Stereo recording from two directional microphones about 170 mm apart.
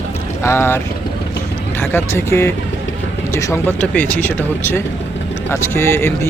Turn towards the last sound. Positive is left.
turn(degrees=15)  # may be behind; listen again after turning